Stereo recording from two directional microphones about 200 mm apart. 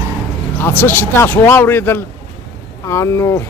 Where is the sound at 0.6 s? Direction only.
10° left (ahead or behind).